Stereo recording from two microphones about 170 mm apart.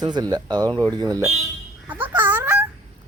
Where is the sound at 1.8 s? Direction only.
10° right (ahead or behind).